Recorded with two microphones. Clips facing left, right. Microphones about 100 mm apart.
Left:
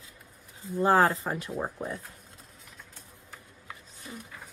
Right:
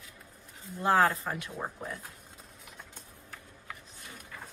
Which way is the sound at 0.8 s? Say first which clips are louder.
Left 3 dB; 30° left (ahead or behind).